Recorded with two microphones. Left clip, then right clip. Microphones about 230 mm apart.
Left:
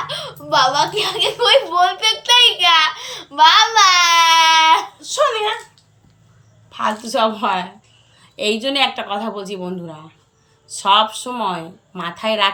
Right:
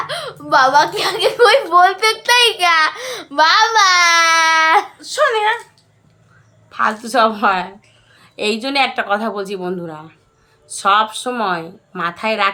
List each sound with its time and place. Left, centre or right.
0.0 s a woman's voice: centre
6.7 s a woman's voice: centre